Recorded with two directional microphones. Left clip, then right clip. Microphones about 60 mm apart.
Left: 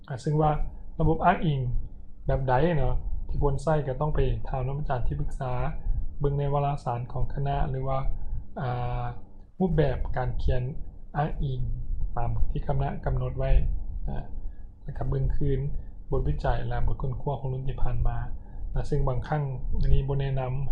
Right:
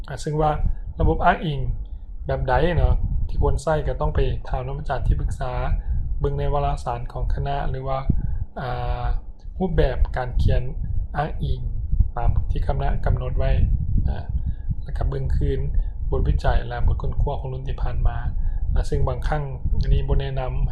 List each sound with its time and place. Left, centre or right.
0.1 s speech: right